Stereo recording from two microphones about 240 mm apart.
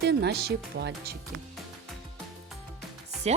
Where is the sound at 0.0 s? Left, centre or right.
Right.